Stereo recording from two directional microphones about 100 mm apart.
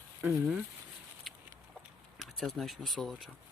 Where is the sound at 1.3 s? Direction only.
Centre (ahead or behind).